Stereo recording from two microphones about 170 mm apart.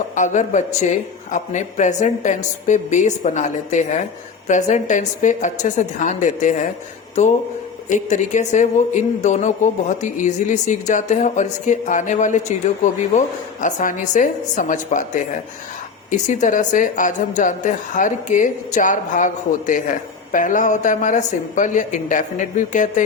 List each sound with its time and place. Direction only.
0.2 s speech: 45° left (ahead or behind)